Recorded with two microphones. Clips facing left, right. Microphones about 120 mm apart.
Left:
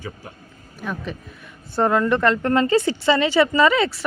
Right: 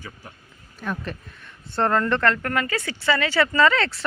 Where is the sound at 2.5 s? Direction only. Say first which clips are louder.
Left 8 dB; 25° left (ahead or behind); by 4.0 s 10° left (ahead or behind).